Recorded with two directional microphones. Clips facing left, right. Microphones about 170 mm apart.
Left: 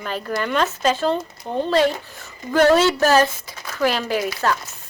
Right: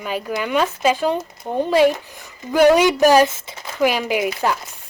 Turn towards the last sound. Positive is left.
turn(degrees=-15)  # may be behind; listen again after turning